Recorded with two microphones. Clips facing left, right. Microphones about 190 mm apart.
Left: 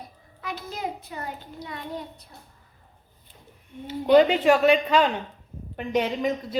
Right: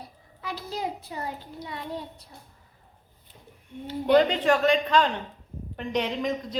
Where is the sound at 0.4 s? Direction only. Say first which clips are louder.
Even; 30° right (ahead or behind).